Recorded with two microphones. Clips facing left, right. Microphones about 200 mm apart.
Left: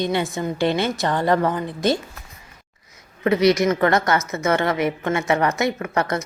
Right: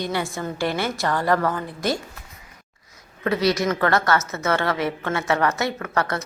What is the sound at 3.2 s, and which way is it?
A woman's voice, 20° left (ahead or behind).